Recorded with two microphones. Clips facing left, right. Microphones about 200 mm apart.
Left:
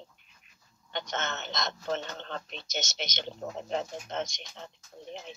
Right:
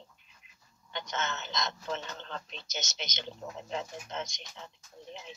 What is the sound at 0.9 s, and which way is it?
Speech, 65° left (ahead or behind).